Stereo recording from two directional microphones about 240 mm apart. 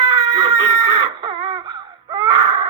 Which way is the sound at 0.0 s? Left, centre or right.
Centre.